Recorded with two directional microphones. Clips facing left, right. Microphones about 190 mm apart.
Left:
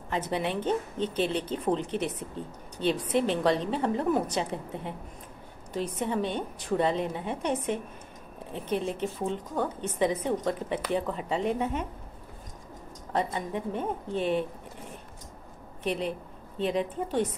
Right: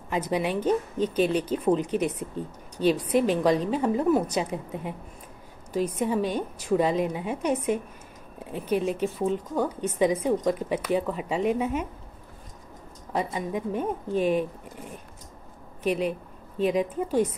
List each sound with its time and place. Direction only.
0.1 s a woman's voice: 10° right (ahead or behind)
13.1 s a woman's voice: 10° right (ahead or behind)
15.8 s a woman's voice: 10° right (ahead or behind)